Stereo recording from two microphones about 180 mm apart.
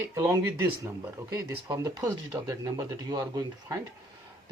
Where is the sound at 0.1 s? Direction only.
20° right (ahead or behind).